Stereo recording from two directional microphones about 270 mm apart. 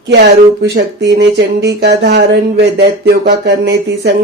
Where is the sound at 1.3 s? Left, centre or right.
Right.